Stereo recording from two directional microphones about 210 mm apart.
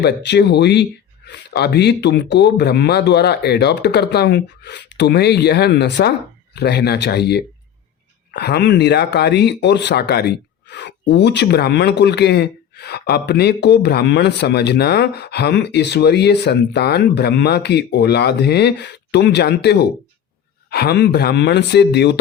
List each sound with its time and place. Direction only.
0.0 s speech: 55° left (ahead or behind)